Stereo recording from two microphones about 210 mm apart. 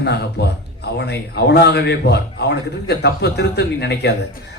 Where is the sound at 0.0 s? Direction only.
50° left (ahead or behind).